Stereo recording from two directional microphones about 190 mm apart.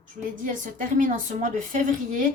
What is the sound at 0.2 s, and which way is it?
A woman's voice, 45° right (ahead or behind).